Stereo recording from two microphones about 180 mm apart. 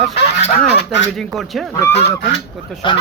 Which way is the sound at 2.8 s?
25° left (ahead or behind).